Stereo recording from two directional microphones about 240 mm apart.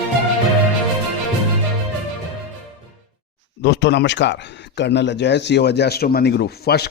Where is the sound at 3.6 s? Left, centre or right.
Left.